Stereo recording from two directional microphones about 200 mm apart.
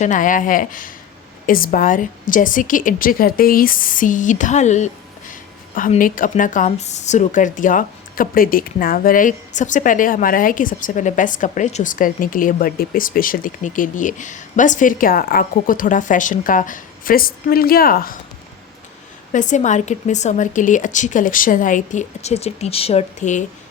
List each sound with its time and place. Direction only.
0.0 s a woman's voice: 40° left (ahead or behind)
19.3 s a woman's voice: 40° left (ahead or behind)